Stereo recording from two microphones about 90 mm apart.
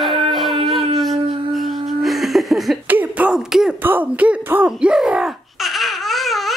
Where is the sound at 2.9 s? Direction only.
20° right (ahead or behind).